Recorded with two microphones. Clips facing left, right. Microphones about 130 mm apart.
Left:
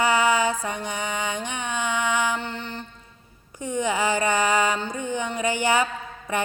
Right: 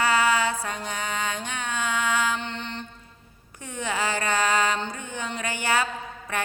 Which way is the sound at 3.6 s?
15° left (ahead or behind).